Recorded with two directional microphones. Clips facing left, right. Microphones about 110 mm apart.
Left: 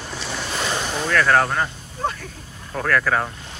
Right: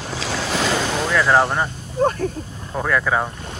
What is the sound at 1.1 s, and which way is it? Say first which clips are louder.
Speech: right 1 dB; 15° right (ahead or behind).